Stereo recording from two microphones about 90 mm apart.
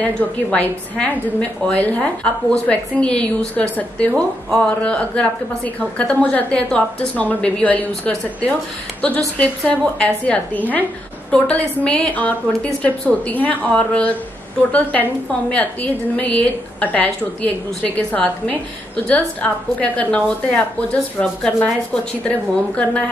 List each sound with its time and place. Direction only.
0.0 s a woman's voice: 15° left (ahead or behind)